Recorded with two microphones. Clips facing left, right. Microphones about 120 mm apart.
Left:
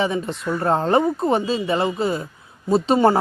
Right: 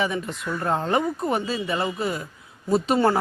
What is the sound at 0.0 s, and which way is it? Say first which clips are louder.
Speech: left 4 dB; 30° left (ahead or behind).